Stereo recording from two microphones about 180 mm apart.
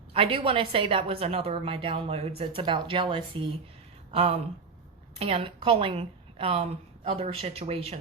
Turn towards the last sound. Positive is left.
turn(degrees=-30)  # may be behind; listen again after turning